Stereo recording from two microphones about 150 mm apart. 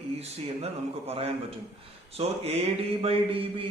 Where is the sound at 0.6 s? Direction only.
40° right (ahead or behind).